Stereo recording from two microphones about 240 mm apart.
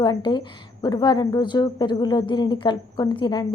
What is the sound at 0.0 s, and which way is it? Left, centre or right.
A woman's voice, centre.